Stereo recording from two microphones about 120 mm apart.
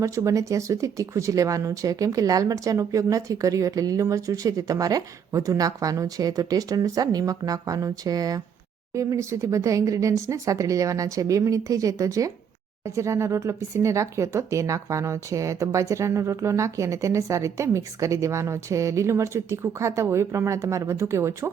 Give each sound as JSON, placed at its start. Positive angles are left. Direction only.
{"t": 0.0, "sound": "speech", "side_deg": -25}